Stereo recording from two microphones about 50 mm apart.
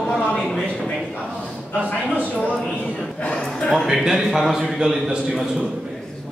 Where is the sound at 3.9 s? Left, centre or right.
Centre.